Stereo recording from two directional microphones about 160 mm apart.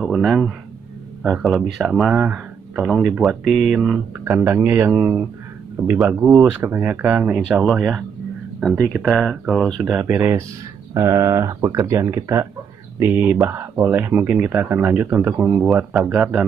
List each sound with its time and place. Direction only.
0.0 s speech: centre (ahead or behind)
10.0 s speech: 15° right (ahead or behind)